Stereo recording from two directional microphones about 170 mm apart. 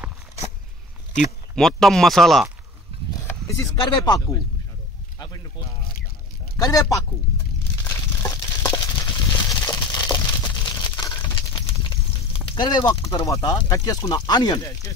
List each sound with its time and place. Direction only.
1.5 s speech: 5° left (ahead or behind)
3.3 s speech: 20° left (ahead or behind)
6.5 s speech: 20° left (ahead or behind)
7.8 s a sound: 20° left (ahead or behind)